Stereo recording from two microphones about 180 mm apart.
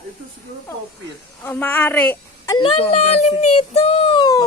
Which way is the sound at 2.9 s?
40° left (ahead or behind).